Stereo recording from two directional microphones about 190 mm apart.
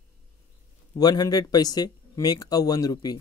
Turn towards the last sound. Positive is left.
turn(degrees=20)  # may be behind; listen again after turning